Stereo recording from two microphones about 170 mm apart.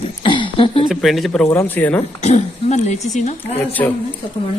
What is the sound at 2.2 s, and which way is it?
Speech, 40° left (ahead or behind).